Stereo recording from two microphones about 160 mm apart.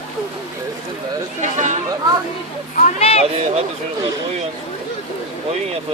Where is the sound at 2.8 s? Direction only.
40° left (ahead or behind).